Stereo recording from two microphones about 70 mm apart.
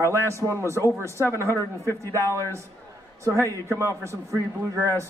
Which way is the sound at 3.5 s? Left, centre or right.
Right.